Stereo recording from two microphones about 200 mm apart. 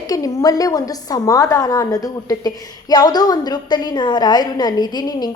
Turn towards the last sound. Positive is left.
turn(degrees=20)  # may be behind; listen again after turning